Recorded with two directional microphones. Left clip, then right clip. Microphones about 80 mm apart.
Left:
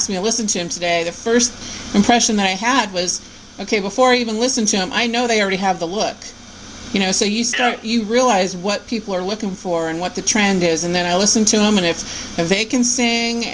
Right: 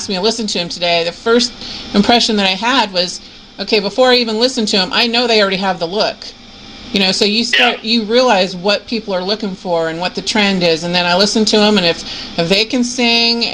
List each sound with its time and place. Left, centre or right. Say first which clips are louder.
0.1 s speech: right 4 dB; centre